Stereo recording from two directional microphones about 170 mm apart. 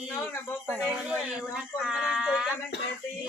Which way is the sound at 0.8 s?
5° right (ahead or behind).